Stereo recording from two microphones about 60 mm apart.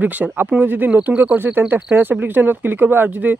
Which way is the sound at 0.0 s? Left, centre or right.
Right.